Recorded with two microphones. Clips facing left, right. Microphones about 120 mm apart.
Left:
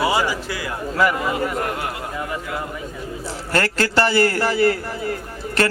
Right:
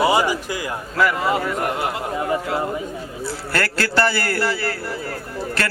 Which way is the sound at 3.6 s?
15° left (ahead or behind).